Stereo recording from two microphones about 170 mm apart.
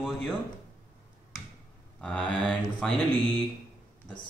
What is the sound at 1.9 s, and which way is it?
Speech, 5° left (ahead or behind).